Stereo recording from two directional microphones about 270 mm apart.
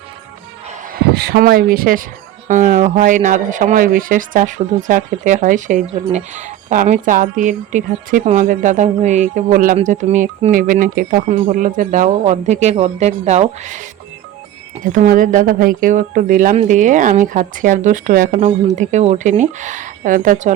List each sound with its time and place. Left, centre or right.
1.1 s speech: right
14.9 s speech: right